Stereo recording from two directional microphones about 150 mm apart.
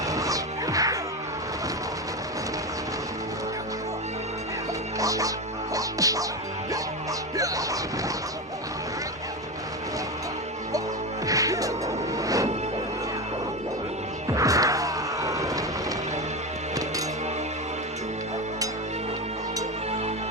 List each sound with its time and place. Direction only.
0.1 s music: 25° right (ahead or behind)
4.9 s music: 20° right (ahead or behind)
7.3 s music: 25° right (ahead or behind)
11.3 s music: 20° right (ahead or behind)
14.3 s music: 20° right (ahead or behind)